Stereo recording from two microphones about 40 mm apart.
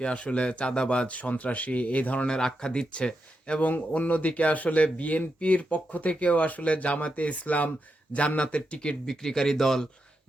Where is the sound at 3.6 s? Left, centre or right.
Left.